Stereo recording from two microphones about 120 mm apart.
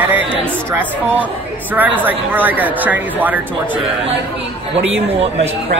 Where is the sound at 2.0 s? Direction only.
15° right (ahead or behind).